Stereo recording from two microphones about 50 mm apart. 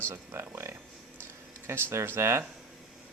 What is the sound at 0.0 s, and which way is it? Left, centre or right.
Speech, right.